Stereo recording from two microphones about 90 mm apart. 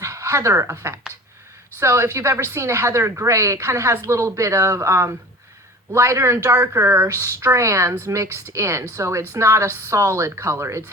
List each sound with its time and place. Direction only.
0.0 s speech: 35° right (ahead or behind)